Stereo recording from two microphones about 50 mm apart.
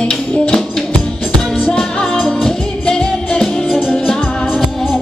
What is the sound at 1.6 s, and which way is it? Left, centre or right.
Music, centre.